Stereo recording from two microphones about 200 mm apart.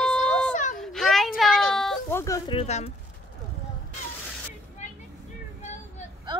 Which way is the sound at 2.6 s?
30° left (ahead or behind).